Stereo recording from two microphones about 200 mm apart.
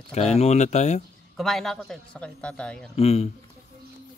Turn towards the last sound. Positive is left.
turn(degrees=30)  # may be behind; listen again after turning